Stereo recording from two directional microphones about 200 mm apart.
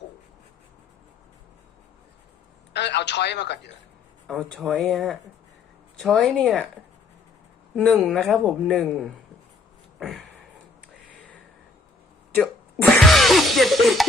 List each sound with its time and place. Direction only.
2.7 s speech: 60° left (ahead or behind)
4.3 s speech: 5° left (ahead or behind)
8.0 s speech: 5° left (ahead or behind)
10.0 s a sound: centre (ahead or behind)
12.3 s music: 5° left (ahead or behind)